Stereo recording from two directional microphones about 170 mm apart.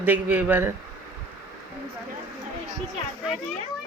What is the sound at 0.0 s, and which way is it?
Speech, 10° right (ahead or behind).